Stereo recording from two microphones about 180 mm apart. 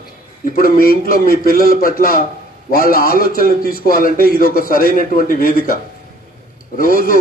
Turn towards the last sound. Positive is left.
turn(degrees=50)  # may be behind; listen again after turning